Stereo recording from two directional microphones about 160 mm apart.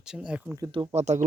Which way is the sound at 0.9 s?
45° right (ahead or behind).